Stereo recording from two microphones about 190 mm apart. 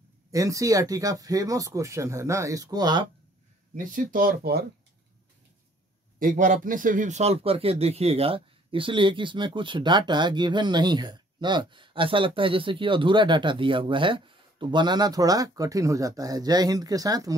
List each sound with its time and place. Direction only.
0.3 s speech: 15° right (ahead or behind)
3.7 s speech: 45° right (ahead or behind)
6.1 s a man's voice: 45° right (ahead or behind); by 17.3 s 20° right (ahead or behind)